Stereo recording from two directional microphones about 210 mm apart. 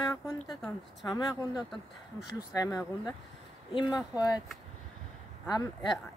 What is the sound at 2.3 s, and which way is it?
Speech, 15° left (ahead or behind).